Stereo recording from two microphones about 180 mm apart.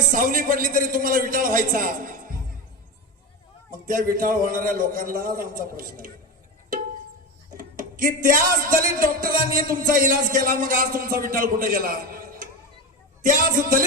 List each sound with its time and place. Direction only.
0.1 s speech: 50° right (ahead or behind)
3.7 s speech: 50° right (ahead or behind)
7.5 s speech: 50° right (ahead or behind)